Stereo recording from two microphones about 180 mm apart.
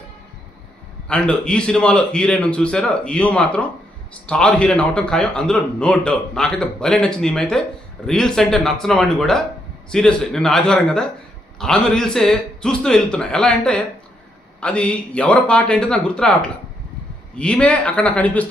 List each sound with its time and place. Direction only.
1.0 s a man's voice: 5° left (ahead or behind)